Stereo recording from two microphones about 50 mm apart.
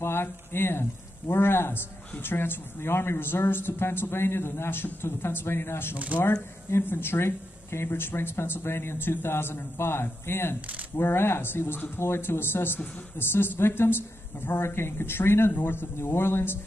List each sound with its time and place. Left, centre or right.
0.0 s speech: left